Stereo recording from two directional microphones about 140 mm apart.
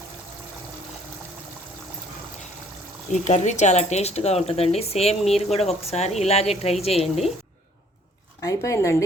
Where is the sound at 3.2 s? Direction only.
55° left (ahead or behind).